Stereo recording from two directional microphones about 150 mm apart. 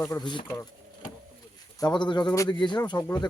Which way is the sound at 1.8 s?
30° left (ahead or behind).